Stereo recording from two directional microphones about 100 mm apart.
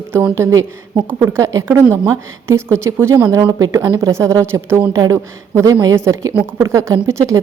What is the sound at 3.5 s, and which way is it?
A woman's voice, 40° right (ahead or behind).